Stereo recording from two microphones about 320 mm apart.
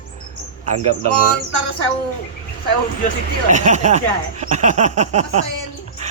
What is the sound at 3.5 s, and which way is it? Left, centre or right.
Speech, right.